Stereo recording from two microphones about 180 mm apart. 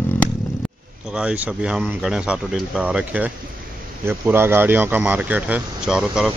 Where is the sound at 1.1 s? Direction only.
5° right (ahead or behind).